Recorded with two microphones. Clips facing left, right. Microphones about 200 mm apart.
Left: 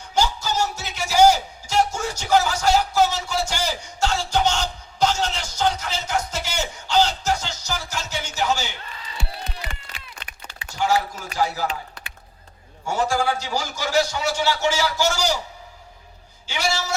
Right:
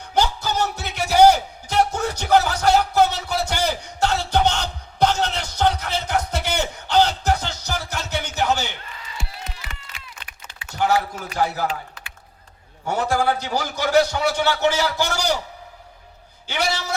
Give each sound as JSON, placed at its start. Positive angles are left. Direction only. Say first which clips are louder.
{"t": 0.0, "sound": "music", "louder": "right 1 dB", "side_deg": -60}
{"t": 9.1, "sound": "music", "louder": "left 3 dB", "side_deg": 35}
{"t": 10.7, "sound": "a sound", "louder": "right 2 dB", "side_deg": -60}
{"t": 11.3, "sound": "a man's voice", "louder": "right 1 dB", "side_deg": -55}
{"t": 12.9, "sound": "a man's voice", "louder": "right 1 dB", "side_deg": -60}
{"t": 16.5, "sound": "a man's voice", "louder": "right 5 dB", "side_deg": -60}